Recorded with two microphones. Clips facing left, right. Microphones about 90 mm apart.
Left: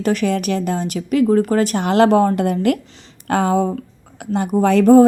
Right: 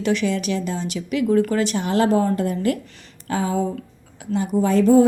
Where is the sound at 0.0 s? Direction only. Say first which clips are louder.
Left 3 dB; 45° left (ahead or behind).